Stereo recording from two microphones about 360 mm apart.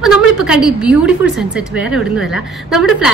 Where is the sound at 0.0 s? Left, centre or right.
Centre.